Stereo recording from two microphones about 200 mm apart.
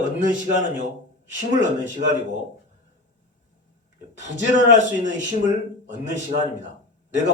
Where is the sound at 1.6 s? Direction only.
40° right (ahead or behind).